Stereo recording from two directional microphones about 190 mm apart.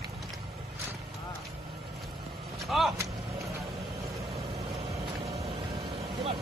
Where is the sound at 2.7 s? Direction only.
Centre (ahead or behind).